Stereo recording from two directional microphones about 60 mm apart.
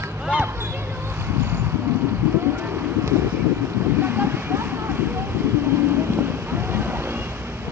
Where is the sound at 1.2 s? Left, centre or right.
Right.